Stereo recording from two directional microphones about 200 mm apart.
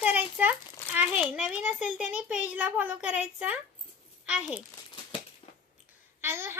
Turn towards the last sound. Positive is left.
turn(degrees=-10)  # may be behind; listen again after turning